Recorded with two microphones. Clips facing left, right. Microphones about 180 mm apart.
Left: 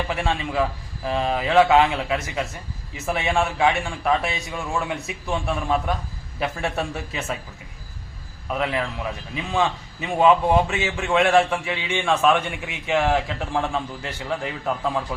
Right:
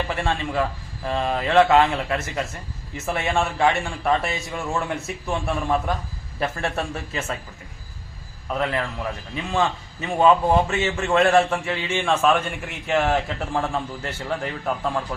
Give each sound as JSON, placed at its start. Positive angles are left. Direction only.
{"t": 0.1, "sound": "a man's voice", "side_deg": 0}
{"t": 8.4, "sound": "a man's voice", "side_deg": 5}